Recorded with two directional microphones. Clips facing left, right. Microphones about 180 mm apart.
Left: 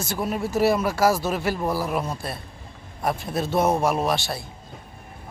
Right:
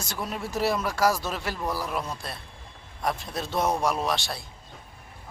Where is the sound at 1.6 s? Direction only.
30° left (ahead or behind).